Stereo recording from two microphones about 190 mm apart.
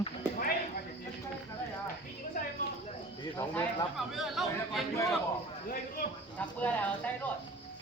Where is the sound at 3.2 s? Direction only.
15° left (ahead or behind).